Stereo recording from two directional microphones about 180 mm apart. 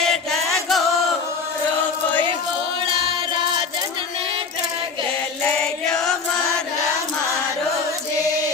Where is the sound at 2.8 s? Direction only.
30° right (ahead or behind).